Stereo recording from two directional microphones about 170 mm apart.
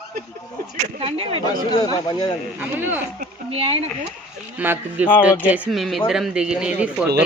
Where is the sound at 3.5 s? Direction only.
35° right (ahead or behind).